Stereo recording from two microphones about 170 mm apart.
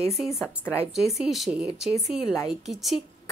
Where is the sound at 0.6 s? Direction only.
15° left (ahead or behind).